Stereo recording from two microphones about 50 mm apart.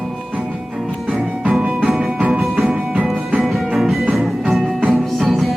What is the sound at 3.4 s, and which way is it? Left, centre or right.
Music, centre.